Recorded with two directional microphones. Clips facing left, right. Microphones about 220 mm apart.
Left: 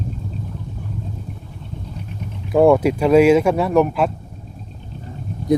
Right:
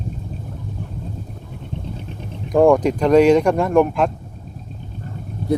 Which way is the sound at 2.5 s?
5° left (ahead or behind).